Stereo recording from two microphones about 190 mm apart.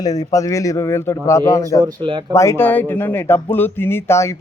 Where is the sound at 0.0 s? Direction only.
20° left (ahead or behind).